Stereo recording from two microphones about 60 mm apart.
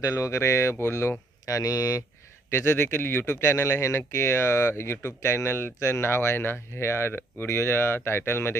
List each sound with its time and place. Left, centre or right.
0.0 s speech: left
1.5 s speech: left
2.5 s speech: left
3.5 s speech: left